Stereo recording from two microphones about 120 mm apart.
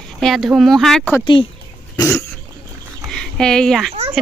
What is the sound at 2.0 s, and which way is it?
Cough, 25° left (ahead or behind).